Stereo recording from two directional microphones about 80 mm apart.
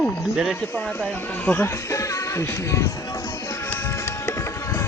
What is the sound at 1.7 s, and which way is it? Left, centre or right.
Music, left.